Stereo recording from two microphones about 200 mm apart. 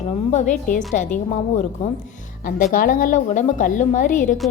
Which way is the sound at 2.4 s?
45° left (ahead or behind).